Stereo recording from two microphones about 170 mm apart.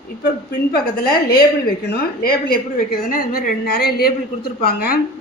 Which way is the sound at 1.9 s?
60° left (ahead or behind).